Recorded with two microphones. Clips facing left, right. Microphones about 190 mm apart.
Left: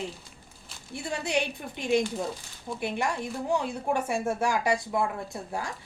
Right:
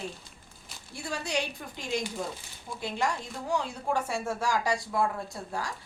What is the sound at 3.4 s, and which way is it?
A woman's voice, 20° left (ahead or behind).